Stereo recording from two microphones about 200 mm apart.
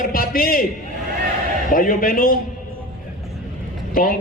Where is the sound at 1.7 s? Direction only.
45° left (ahead or behind).